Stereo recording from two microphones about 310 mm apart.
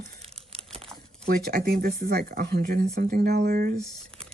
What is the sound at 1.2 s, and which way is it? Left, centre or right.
Speech, right.